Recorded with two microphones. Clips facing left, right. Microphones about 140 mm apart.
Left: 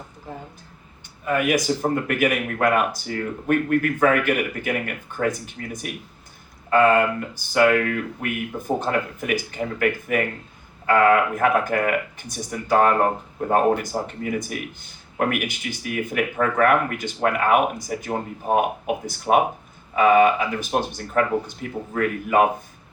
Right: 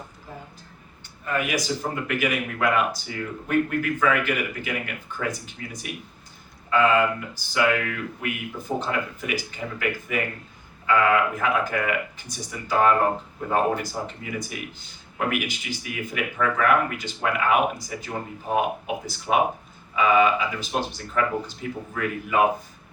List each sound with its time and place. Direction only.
1.5 s speech: 55° left (ahead or behind)
19.3 s speech: 55° left (ahead or behind)